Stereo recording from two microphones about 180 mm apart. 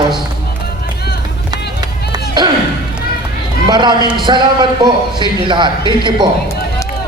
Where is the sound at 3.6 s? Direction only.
25° right (ahead or behind).